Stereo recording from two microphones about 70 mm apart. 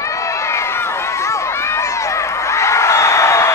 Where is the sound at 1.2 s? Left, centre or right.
Left.